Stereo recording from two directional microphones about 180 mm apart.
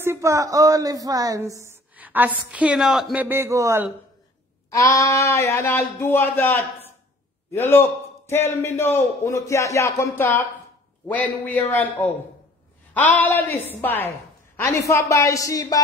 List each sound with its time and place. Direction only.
0.0 s a woman's voice: 15° right (ahead or behind)
4.6 s a man's voice: 15° left (ahead or behind)